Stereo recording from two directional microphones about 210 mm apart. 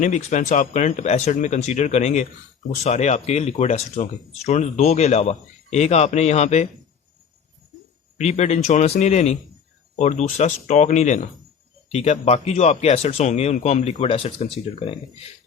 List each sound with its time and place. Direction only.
0.0 s speech: 35° left (ahead or behind)
8.2 s speech: 30° left (ahead or behind)